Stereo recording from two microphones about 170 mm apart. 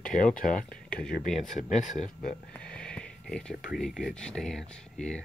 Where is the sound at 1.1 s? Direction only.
50° left (ahead or behind).